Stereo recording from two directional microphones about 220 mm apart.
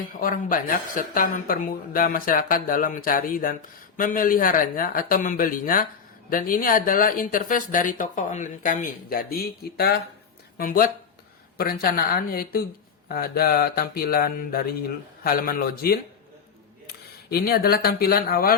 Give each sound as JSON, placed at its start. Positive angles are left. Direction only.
{"t": 0.1, "sound": "speech", "side_deg": 40}
{"t": 17.2, "sound": "speech", "side_deg": 45}